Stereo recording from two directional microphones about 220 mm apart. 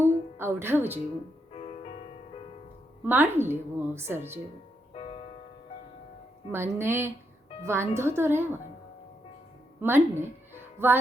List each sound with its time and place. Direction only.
0.0 s music: 10° right (ahead or behind)
1.5 s music: 25° left (ahead or behind)
3.0 s a woman's voice: 10° right (ahead or behind)
4.9 s music: 25° left (ahead or behind)
6.5 s a woman's voice: 10° right (ahead or behind)
9.8 s speech: 10° right (ahead or behind)